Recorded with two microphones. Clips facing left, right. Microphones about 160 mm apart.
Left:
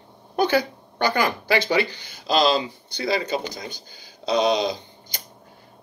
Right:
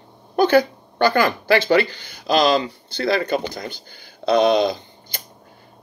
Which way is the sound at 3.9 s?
60° right (ahead or behind).